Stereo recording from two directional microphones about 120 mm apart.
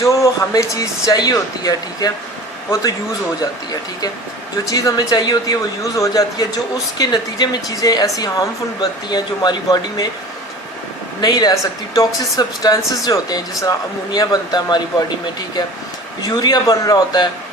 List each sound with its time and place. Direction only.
0.0 s speech: 25° left (ahead or behind)
4.7 s speech: 30° left (ahead or behind)
11.2 s speech: 35° left (ahead or behind)
16.2 s speech: 35° left (ahead or behind)